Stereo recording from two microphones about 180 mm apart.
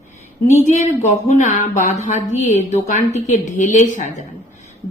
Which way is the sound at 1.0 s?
40° left (ahead or behind).